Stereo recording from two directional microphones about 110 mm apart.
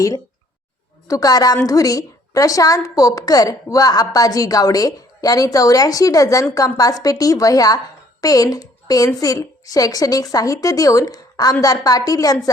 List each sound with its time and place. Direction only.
1.0 s a woman's voice: 35° left (ahead or behind)